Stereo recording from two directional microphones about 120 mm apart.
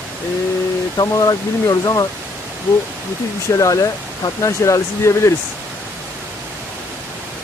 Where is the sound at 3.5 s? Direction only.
25° left (ahead or behind).